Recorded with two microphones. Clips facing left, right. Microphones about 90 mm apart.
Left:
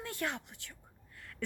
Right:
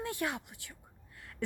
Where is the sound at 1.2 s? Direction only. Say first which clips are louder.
Right 2 dB; 20° right (ahead or behind).